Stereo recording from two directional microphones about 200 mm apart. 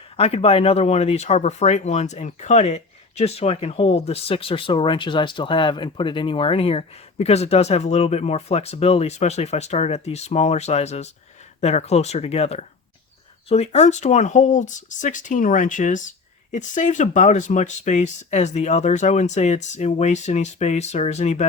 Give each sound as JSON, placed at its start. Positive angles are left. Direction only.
{"t": 0.2, "sound": "speech", "side_deg": 30}